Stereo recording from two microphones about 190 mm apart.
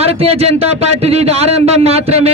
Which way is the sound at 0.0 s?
30° right (ahead or behind).